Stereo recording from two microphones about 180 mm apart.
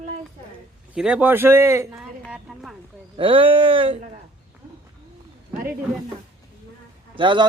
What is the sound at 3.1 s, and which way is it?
Speech, 30° right (ahead or behind).